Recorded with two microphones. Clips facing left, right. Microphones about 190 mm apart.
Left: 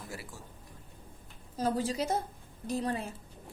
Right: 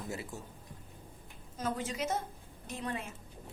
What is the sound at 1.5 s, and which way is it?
A woman's voice, 35° left (ahead or behind).